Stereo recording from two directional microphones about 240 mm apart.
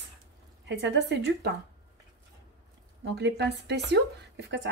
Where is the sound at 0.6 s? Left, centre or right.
Right.